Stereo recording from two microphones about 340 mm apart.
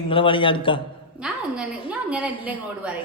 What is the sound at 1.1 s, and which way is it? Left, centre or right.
A woman's voice, centre.